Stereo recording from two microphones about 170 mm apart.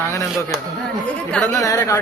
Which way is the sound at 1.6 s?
20° left (ahead or behind).